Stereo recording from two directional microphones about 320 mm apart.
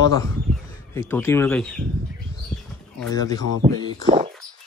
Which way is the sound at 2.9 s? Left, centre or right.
Centre.